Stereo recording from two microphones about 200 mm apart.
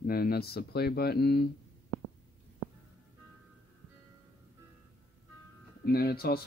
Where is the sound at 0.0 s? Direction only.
50° left (ahead or behind).